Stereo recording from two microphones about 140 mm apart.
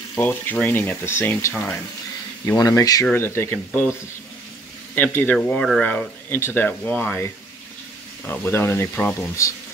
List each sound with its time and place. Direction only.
0.1 s speech: 15° left (ahead or behind)
4.9 s speech: 15° left (ahead or behind)
8.3 s speech: 15° left (ahead or behind)